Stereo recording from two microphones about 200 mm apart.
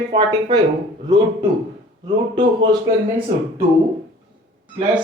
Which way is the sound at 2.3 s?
20° right (ahead or behind).